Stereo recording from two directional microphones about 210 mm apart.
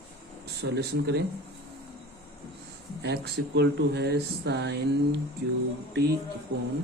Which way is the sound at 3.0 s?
50° right (ahead or behind).